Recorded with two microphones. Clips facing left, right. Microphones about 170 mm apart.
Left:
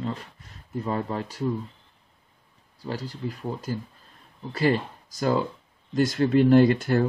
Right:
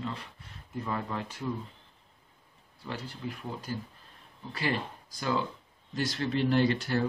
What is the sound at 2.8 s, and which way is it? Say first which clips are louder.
Speech: left 6 dB; 40° left (ahead or behind).